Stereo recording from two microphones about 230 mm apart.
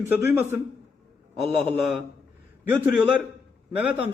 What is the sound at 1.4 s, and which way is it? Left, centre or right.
A man's voice, centre.